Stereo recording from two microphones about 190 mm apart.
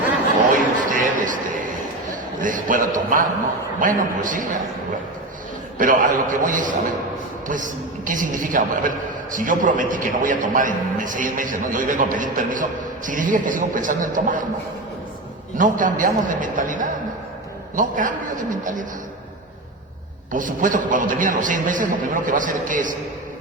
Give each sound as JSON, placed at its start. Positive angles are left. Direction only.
{"t": 0.9, "sound": "a sound", "side_deg": -45}
{"t": 3.8, "sound": "a man's voice", "side_deg": -45}
{"t": 5.7, "sound": "a man's voice", "side_deg": -45}
{"t": 15.5, "sound": "a man's voice", "side_deg": -45}
{"t": 20.3, "sound": "a man's voice", "side_deg": -45}